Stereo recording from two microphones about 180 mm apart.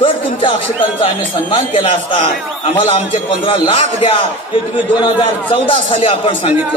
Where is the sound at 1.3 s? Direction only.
30° left (ahead or behind).